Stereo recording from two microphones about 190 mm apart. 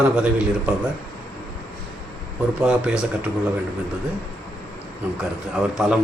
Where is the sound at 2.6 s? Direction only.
5° right (ahead or behind).